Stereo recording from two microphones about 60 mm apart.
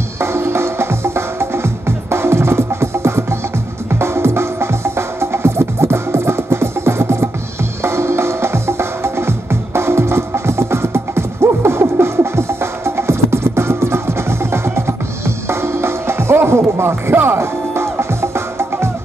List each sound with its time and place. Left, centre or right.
0.2 s music: right